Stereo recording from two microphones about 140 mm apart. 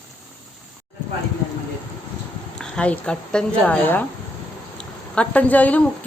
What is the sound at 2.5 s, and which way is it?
Speech, 5° left (ahead or behind).